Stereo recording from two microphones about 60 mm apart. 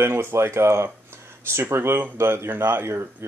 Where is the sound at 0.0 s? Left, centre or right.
Right.